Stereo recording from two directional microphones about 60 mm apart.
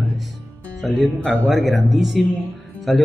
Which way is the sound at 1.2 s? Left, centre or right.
Left.